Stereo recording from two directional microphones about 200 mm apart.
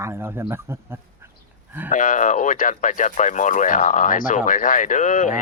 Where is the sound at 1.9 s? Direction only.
40° left (ahead or behind).